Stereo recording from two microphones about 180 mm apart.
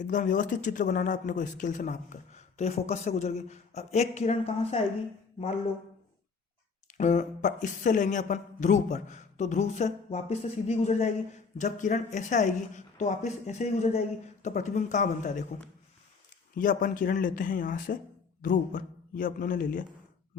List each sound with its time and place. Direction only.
0.0 s speech: 45° left (ahead or behind)
6.8 s speech: 40° left (ahead or behind)
16.6 s speech: 45° left (ahead or behind)